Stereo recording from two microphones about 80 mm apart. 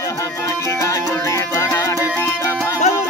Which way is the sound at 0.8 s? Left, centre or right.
Left.